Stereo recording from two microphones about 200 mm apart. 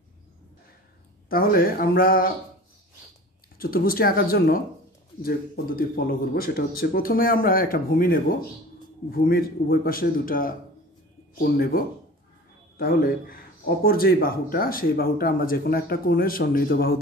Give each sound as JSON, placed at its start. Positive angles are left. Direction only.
{"t": 1.3, "sound": "speech", "side_deg": 45}
{"t": 3.5, "sound": "speech", "side_deg": 45}
{"t": 5.8, "sound": "a man's voice", "side_deg": 45}